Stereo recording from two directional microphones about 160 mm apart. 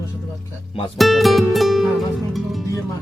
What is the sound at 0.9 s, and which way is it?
Music, centre (ahead or behind).